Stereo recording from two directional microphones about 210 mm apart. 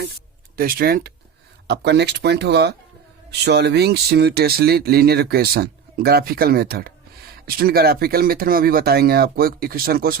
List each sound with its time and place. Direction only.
0.5 s speech: 45° right (ahead or behind)